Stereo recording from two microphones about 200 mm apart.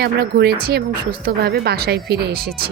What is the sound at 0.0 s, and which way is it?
Speech, 55° right (ahead or behind).